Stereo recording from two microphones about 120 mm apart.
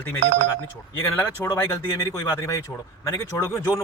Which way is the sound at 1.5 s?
20° left (ahead or behind).